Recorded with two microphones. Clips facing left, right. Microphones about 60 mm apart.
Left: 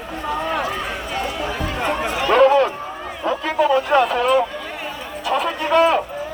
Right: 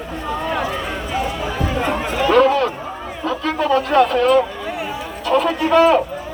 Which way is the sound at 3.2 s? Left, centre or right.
Centre.